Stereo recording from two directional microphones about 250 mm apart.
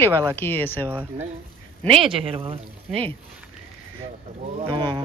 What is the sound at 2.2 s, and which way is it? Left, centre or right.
Speech, right.